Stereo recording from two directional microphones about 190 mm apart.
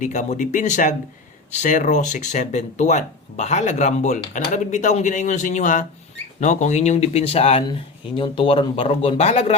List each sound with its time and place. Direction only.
0.0 s speech: 40° left (ahead or behind)